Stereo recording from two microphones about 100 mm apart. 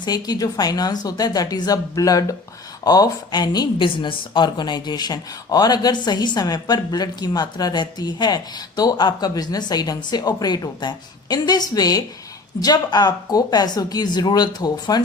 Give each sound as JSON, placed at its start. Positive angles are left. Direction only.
{"t": 0.0, "sound": "a woman's voice", "side_deg": 40}
{"t": 3.8, "sound": "speech", "side_deg": 55}